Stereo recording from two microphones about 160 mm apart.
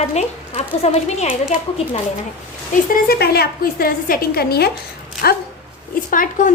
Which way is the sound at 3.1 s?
75° left (ahead or behind).